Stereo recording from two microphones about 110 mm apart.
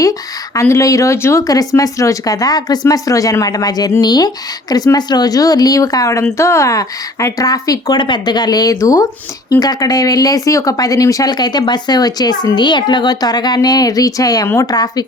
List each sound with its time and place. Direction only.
0.0 s speech: 30° left (ahead or behind)